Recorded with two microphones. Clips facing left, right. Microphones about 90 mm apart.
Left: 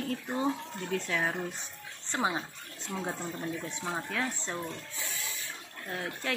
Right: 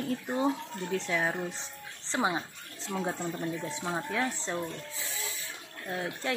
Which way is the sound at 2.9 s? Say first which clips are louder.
Right 3 dB; 10° right (ahead or behind).